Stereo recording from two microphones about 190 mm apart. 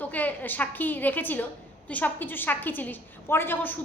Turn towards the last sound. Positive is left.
turn(degrees=10)  # may be behind; listen again after turning